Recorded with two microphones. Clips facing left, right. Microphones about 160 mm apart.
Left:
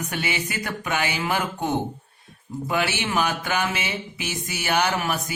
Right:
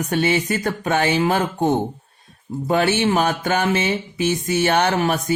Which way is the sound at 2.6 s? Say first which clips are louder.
Right 6 dB; 45° right (ahead or behind).